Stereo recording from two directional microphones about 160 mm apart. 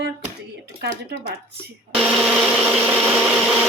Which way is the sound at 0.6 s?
90° right.